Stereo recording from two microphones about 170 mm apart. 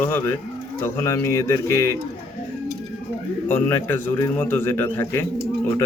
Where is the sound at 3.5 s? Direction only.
10° left (ahead or behind).